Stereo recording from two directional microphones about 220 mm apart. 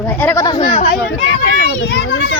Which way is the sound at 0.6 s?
30° left (ahead or behind).